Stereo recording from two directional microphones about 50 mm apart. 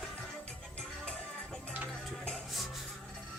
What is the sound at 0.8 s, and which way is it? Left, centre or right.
Music, centre.